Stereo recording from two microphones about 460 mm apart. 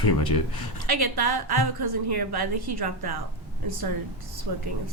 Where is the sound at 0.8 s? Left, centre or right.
Right.